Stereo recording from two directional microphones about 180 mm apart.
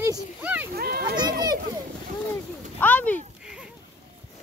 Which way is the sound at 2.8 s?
10° left (ahead or behind).